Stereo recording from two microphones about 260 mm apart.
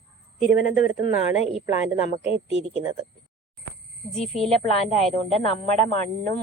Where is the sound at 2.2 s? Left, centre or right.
Right.